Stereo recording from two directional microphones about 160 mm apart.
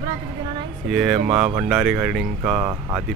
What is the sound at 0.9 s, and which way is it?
Speech, centre (ahead or behind).